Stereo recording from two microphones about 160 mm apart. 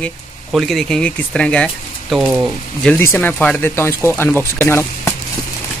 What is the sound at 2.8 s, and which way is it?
Speech, 5° left (ahead or behind).